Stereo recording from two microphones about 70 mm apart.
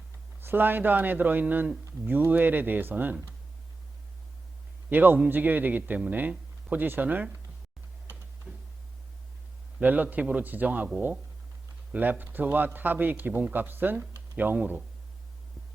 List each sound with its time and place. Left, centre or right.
0.3 s a man's voice: right
4.9 s a man's voice: right
9.8 s a man's voice: right
11.9 s a man's voice: right